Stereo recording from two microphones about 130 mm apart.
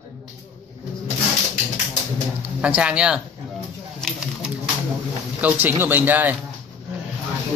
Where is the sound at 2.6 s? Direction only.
10° right (ahead or behind).